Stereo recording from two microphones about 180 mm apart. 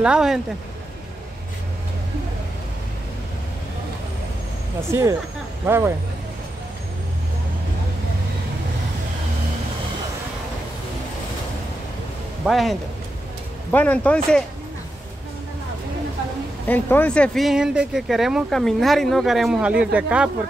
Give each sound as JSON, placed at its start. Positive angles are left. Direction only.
{"t": 0.0, "sound": "speech", "side_deg": -5}
{"t": 5.7, "sound": "speech", "side_deg": -15}
{"t": 12.4, "sound": "speech", "side_deg": 0}
{"t": 16.6, "sound": "speech", "side_deg": 10}